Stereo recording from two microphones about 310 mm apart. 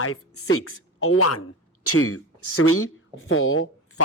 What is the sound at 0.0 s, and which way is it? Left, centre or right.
A woman's voice, left.